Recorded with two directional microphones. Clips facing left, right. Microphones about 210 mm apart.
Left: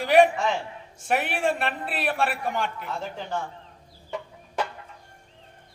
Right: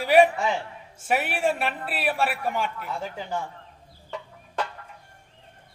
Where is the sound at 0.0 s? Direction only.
5° right (ahead or behind).